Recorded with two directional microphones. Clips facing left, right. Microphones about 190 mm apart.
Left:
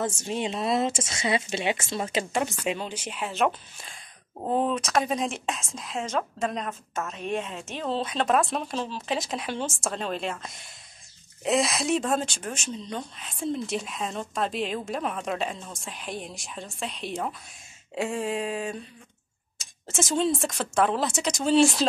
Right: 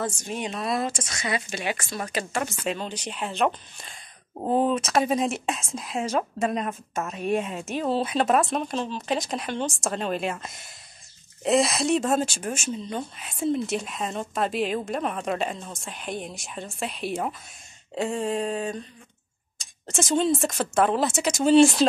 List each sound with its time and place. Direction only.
0.2 s a woman's voice: 25° left (ahead or behind); by 21.8 s centre (ahead or behind)